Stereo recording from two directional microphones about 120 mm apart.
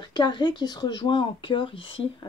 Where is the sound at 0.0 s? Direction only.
35° left (ahead or behind).